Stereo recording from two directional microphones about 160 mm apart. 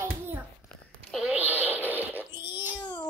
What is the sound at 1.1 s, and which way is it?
Fart, 5° right (ahead or behind).